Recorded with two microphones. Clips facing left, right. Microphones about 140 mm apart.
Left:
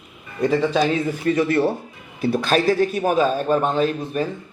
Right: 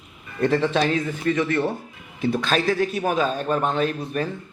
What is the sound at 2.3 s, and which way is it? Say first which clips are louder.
Speech: left 4 dB; 5° left (ahead or behind).